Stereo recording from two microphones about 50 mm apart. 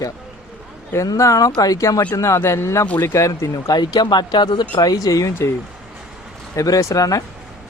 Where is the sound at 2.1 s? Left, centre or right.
Left.